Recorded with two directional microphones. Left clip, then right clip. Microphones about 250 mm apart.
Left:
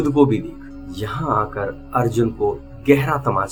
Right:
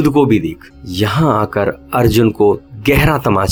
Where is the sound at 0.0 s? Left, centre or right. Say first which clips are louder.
Right 5 dB; right.